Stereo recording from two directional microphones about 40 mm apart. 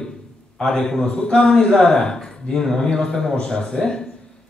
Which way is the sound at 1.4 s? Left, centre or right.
Centre.